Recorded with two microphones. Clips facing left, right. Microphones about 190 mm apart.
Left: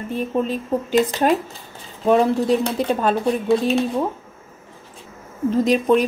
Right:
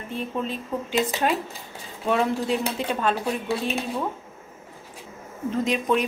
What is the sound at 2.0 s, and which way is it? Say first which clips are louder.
A woman's voice: left 7 dB; 40° left (ahead or behind).